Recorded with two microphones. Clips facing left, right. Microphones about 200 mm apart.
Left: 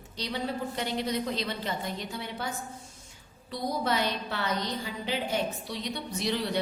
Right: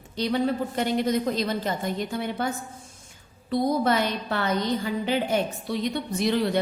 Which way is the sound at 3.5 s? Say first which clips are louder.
Right 7 dB; 55° right (ahead or behind).